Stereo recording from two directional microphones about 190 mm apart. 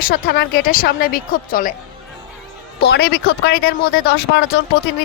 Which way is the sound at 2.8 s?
55° left (ahead or behind).